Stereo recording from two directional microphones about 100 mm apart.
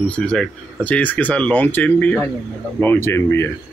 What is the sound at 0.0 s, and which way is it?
Speech, 10° left (ahead or behind).